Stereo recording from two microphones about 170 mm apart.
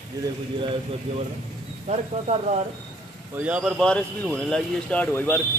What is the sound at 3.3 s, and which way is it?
Speech, 10° right (ahead or behind).